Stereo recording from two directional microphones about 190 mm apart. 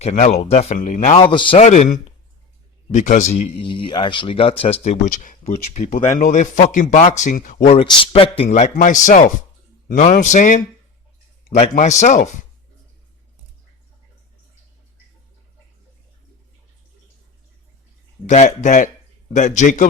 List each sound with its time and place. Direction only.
0.0 s speech: 35° left (ahead or behind)
1.6 s speech: 40° left (ahead or behind)
3.7 s speech: 25° left (ahead or behind)
18.3 s speech: 40° left (ahead or behind)